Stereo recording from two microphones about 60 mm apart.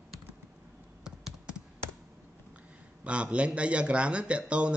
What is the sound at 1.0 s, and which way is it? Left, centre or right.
Computer keyboard, centre.